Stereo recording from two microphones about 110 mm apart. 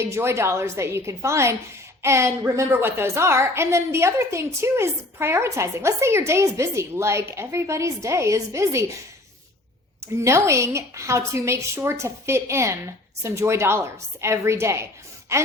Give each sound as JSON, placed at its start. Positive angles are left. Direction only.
{"t": 0.0, "sound": "a woman's voice", "side_deg": -25}
{"t": 10.2, "sound": "a woman's voice", "side_deg": -25}